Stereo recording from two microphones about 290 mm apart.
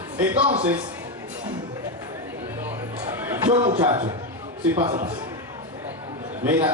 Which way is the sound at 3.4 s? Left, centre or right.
Centre.